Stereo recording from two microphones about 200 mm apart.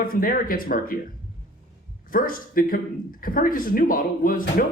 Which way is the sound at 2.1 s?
45° left (ahead or behind).